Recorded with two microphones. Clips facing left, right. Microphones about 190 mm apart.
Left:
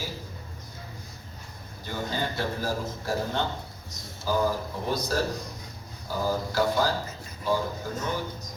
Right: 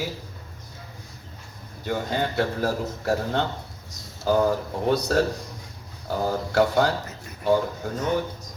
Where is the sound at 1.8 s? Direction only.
60° right (ahead or behind).